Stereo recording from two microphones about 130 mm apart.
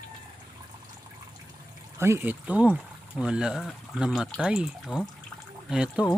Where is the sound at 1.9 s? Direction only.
20° right (ahead or behind).